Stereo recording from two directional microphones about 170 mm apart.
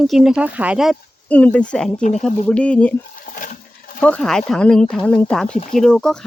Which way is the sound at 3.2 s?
50° left (ahead or behind).